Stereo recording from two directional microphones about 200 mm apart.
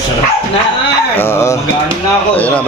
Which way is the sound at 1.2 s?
15° left (ahead or behind).